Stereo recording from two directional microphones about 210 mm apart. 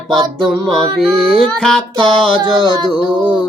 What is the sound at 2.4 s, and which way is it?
Music, 25° right (ahead or behind).